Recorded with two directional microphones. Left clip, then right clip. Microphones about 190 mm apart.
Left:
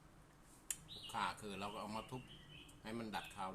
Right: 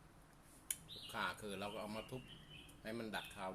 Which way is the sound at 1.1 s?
10° left (ahead or behind).